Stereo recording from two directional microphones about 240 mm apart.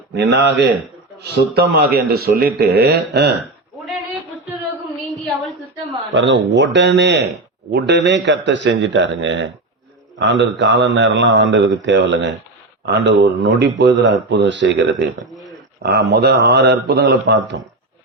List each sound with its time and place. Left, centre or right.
0.1 s a man's voice: right
6.1 s speech: right